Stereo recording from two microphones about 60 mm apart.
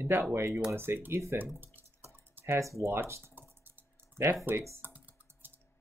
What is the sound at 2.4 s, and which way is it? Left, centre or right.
Speech, right.